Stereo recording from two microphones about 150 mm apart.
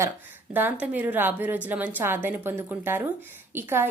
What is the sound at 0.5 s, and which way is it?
Speech, 10° right (ahead or behind).